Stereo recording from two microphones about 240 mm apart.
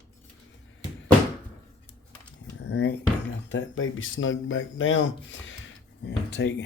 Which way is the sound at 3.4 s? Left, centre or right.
Left.